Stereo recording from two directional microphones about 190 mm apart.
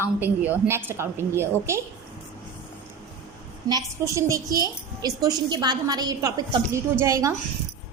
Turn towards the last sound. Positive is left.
turn(degrees=-15)  # may be behind; listen again after turning